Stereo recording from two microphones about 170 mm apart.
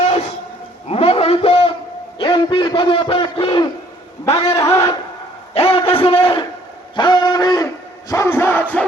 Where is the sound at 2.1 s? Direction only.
30° left (ahead or behind).